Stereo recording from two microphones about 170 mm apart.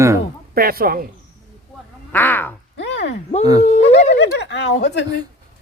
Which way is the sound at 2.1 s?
10° left (ahead or behind).